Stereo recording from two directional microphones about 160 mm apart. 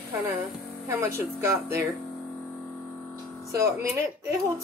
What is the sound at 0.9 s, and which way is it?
Speech, 15° right (ahead or behind).